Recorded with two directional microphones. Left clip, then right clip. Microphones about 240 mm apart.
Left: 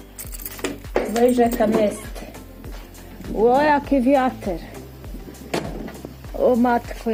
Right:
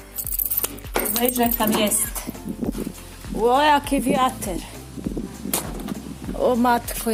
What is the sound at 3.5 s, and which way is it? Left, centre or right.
Speech, centre.